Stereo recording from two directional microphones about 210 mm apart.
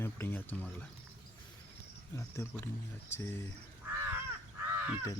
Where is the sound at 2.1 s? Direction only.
10° left (ahead or behind).